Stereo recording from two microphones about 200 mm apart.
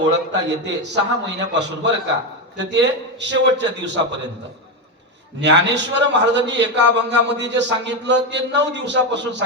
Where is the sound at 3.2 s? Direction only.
60° right (ahead or behind).